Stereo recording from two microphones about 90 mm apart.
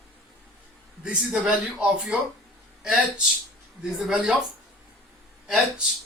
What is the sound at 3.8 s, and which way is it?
Speech, 5° right (ahead or behind).